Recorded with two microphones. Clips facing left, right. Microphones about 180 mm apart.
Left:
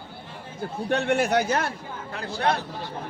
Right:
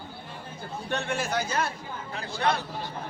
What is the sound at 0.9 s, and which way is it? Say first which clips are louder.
Speech: left 7 dB; 60° left (ahead or behind).